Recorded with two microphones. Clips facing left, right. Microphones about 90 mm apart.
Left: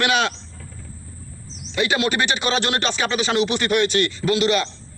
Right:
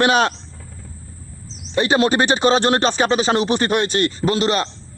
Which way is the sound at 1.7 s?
35° right (ahead or behind).